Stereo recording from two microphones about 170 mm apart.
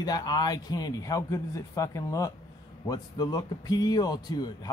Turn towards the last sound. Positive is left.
turn(degrees=25)  # may be behind; listen again after turning